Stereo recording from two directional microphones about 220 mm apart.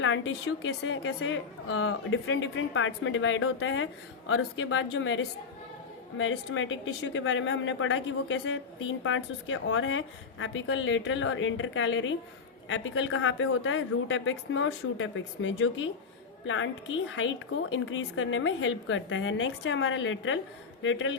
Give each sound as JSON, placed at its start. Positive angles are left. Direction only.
{"t": 0.0, "sound": "speech", "side_deg": 60}
{"t": 17.1, "sound": "speech", "side_deg": 60}